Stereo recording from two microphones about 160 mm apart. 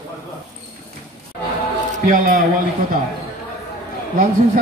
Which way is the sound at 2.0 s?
65° right (ahead or behind).